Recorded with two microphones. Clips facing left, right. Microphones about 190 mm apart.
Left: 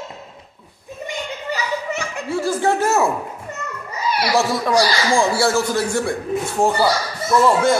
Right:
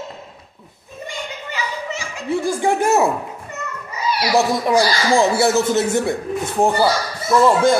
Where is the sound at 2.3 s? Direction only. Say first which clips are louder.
Right 1 dB; 15° right (ahead or behind).